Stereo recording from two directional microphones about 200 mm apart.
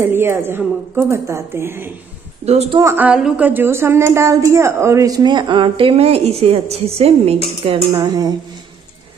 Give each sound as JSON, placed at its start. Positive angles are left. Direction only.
{"t": 0.0, "sound": "a woman's voice", "side_deg": -10}
{"t": 2.4, "sound": "speech", "side_deg": -30}
{"t": 2.8, "sound": "a woman's voice", "side_deg": -10}